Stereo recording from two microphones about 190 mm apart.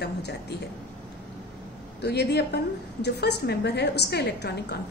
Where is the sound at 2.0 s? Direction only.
60° left (ahead or behind).